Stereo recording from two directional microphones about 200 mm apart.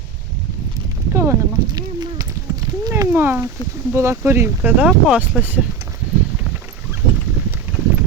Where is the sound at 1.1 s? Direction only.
15° right (ahead or behind).